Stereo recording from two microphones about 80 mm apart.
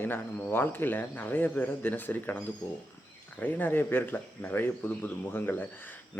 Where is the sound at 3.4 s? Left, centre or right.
Left.